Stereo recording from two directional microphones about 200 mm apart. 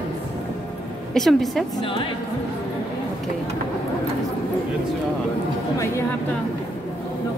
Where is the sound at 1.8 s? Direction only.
25° left (ahead or behind).